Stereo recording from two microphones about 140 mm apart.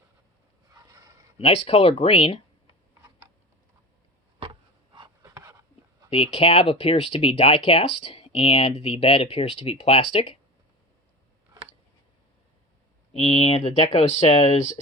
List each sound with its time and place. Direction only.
0.7 s a sound: 25° right (ahead or behind)
1.4 s speech: 45° left (ahead or behind)
5.2 s dog: 20° right (ahead or behind)
6.3 s speech: 40° left (ahead or behind)
13.1 s speech: 45° left (ahead or behind)